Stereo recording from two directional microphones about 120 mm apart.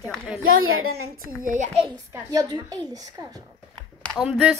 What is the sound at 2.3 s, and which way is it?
A woman's voice, 35° right (ahead or behind).